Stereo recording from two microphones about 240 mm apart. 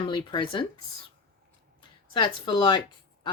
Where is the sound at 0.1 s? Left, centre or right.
Centre.